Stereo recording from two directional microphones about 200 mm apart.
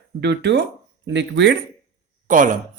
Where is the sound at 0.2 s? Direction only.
60° right (ahead or behind).